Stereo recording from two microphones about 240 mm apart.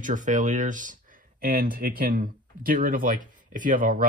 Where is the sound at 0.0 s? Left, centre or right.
Right.